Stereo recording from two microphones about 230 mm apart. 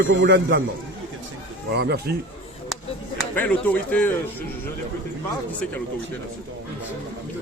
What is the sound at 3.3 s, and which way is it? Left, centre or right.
Speech, centre.